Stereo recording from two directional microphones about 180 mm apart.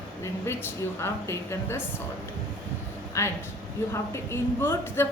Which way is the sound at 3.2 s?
15° left (ahead or behind).